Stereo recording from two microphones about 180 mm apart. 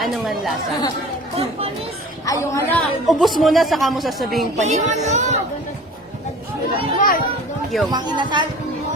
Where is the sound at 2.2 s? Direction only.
15° left (ahead or behind).